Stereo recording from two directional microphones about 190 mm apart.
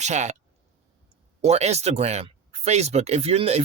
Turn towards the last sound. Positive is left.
turn(degrees=-35)  # may be behind; listen again after turning